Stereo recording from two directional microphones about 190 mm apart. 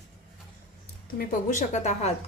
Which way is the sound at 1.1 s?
40° left (ahead or behind).